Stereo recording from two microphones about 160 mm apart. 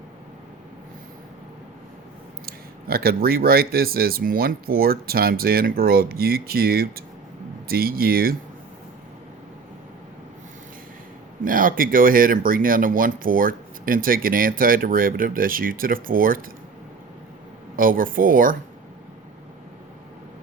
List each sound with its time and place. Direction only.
2.5 s speech: 70° right (ahead or behind)
11.4 s speech: 60° right (ahead or behind)
17.7 s speech: 60° right (ahead or behind)